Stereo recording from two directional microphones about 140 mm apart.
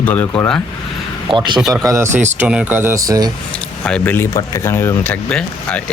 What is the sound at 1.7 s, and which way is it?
Speech, 25° right (ahead or behind).